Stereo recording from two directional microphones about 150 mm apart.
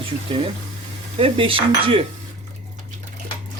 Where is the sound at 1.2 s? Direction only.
35° right (ahead or behind).